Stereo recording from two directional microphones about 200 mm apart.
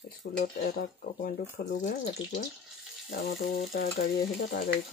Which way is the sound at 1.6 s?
45° left (ahead or behind).